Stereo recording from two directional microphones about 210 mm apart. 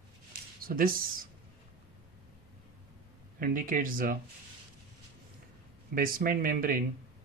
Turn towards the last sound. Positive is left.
turn(degrees=-45)  # may be behind; listen again after turning